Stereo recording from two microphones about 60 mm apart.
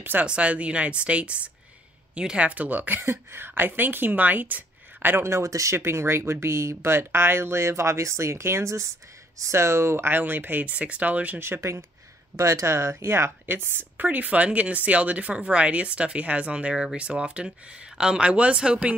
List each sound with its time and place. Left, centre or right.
0.2 s a woman's voice: right
5.2 s speech: right
10.1 s a woman's voice: right
11.3 s a woman's voice: right; by 18.9 s centre